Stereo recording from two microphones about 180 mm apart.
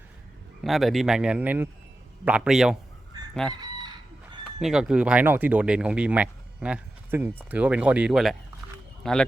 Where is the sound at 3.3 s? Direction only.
5° left (ahead or behind).